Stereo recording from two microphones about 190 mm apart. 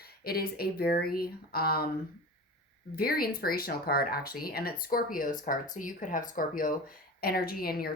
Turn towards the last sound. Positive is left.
turn(degrees=50)  # may be behind; listen again after turning